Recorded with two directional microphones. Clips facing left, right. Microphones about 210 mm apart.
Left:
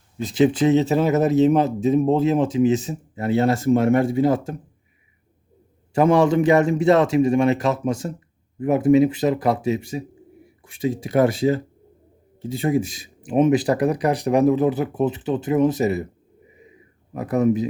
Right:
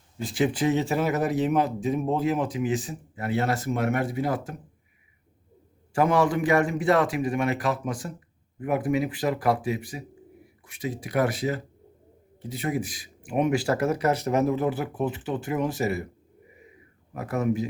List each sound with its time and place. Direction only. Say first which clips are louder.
0.2 s speech: left 7 dB; 20° left (ahead or behind)
5.9 s speech: left 6 dB; 25° left (ahead or behind)
17.2 s speech: left 7 dB; 20° left (ahead or behind)